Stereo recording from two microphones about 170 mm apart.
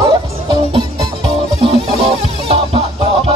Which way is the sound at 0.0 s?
30° right (ahead or behind).